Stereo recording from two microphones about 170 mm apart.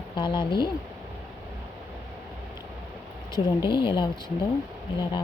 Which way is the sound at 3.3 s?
25° left (ahead or behind).